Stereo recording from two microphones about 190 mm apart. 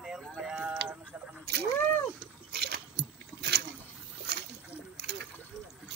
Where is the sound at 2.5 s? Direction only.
55° right (ahead or behind).